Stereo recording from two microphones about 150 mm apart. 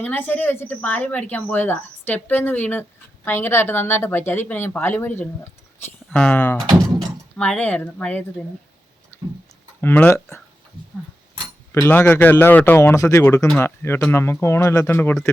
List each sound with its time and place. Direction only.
0.0 s speech: 10° left (ahead or behind)
9.8 s speech: 10° left (ahead or behind)
11.7 s speech: 15° left (ahead or behind)